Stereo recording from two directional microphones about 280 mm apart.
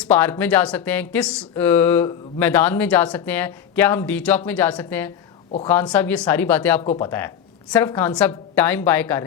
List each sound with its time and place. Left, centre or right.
0.0 s speech: centre